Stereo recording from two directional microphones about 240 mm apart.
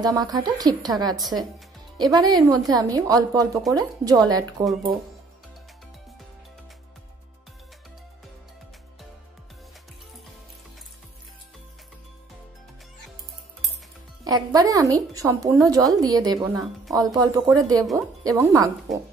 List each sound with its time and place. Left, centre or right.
0.0 s a woman's voice: centre
14.2 s a woman's voice: centre